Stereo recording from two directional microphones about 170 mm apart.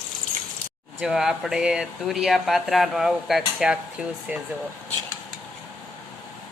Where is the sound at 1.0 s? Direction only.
Centre (ahead or behind).